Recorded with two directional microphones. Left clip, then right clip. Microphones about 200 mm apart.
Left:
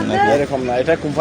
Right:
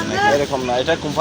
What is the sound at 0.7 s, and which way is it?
Speech, 50° left (ahead or behind).